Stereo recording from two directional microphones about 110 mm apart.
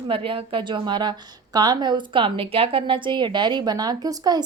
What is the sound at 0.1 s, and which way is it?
A woman's voice, 55° right (ahead or behind).